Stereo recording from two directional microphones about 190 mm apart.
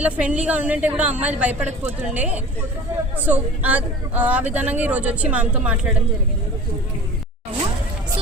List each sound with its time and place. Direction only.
0.0 s speech: 5° right (ahead or behind)